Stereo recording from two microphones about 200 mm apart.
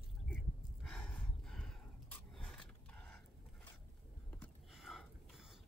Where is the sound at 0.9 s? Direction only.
5° left (ahead or behind).